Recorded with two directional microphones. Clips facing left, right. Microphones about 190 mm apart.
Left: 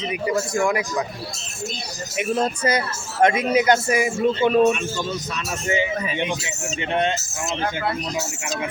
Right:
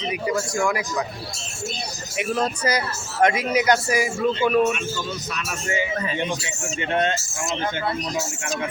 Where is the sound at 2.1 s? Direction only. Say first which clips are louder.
Left 2 dB; 20° left (ahead or behind).